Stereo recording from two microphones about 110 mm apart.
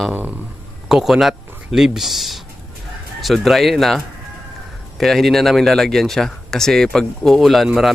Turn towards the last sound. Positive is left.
turn(degrees=0)  # may be behind; listen again after turning